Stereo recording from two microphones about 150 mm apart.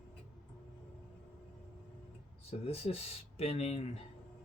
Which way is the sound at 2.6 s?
40° left (ahead or behind).